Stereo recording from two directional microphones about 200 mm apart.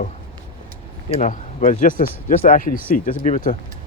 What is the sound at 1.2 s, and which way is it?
Speech, 40° left (ahead or behind).